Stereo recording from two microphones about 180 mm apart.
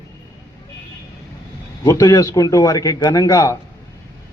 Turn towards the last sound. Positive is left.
turn(degrees=15)  # may be behind; listen again after turning